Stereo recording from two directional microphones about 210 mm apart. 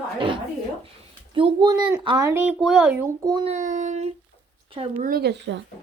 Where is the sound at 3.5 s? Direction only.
35° right (ahead or behind).